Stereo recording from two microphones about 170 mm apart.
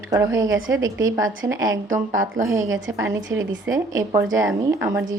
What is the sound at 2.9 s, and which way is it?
A woman's voice, 15° right (ahead or behind).